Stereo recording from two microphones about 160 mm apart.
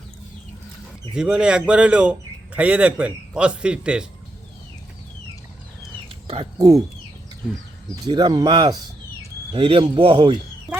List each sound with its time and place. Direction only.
1.1 s speech: 5° right (ahead or behind)
6.1 s a sound: 35° right (ahead or behind)
6.6 s speech: 20° right (ahead or behind)
8.0 s a man's voice: 25° right (ahead or behind)